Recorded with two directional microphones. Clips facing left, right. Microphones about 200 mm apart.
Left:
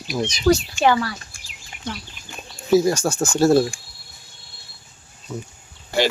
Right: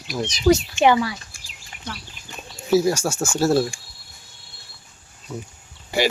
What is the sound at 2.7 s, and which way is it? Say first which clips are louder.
Speech: left 2 dB; 5° right (ahead or behind).